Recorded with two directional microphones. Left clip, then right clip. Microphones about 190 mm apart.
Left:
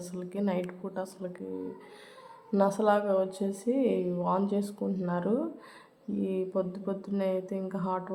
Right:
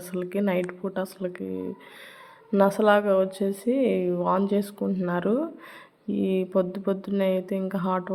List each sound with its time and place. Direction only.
0.0 s speech: 25° right (ahead or behind)